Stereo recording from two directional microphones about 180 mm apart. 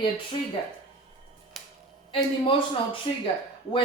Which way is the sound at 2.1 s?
30° left (ahead or behind).